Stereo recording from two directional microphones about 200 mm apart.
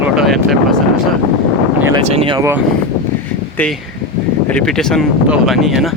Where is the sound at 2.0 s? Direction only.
25° right (ahead or behind).